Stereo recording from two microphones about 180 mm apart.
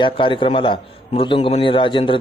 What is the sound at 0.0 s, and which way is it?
A man's voice, 30° left (ahead or behind).